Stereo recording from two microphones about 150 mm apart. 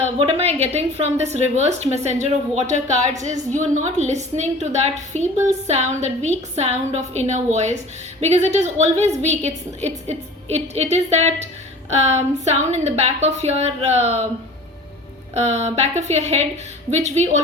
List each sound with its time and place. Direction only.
0.0 s a woman's voice: 40° right (ahead or behind)
12.5 s a woman's voice: 45° right (ahead or behind)
15.4 s a woman's voice: 45° right (ahead or behind)